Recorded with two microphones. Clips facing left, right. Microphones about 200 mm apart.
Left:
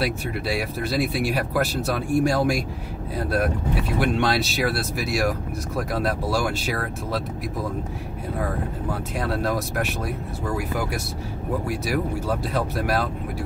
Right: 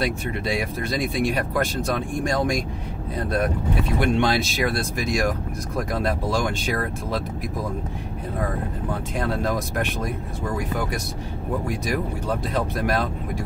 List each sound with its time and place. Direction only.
0.0 s speech: 5° left (ahead or behind)
9.2 s speech: 5° left (ahead or behind)